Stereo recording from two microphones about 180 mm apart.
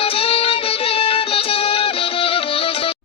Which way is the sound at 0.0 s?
30° left (ahead or behind).